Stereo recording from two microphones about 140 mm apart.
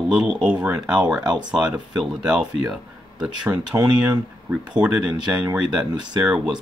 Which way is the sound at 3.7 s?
30° right (ahead or behind).